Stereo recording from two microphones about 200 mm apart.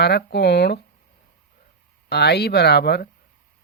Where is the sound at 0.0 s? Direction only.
55° left (ahead or behind).